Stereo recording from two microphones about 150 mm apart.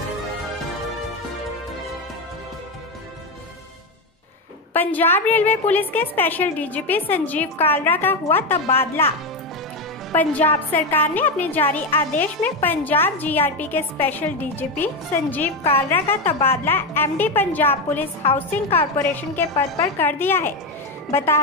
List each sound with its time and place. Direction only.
4.7 s a woman's voice: 15° left (ahead or behind)
10.1 s a woman's voice: 10° left (ahead or behind)